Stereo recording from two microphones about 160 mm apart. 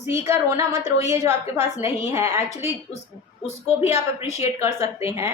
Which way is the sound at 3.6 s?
40° left (ahead or behind).